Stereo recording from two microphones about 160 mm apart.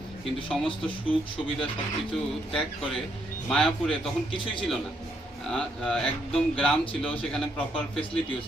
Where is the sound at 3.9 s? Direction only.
30° left (ahead or behind).